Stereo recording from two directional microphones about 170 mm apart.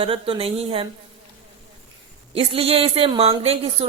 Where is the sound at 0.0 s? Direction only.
35° right (ahead or behind).